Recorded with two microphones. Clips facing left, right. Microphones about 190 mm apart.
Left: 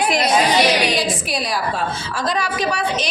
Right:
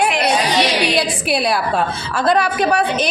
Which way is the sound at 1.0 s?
65° right (ahead or behind).